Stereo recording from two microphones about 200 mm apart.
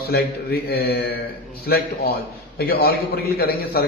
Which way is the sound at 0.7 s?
50° left (ahead or behind).